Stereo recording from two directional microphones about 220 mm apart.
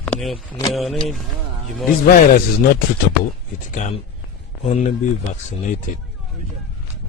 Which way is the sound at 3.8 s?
35° left (ahead or behind).